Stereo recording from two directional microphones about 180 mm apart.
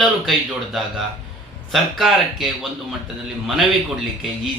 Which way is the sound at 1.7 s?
Centre (ahead or behind).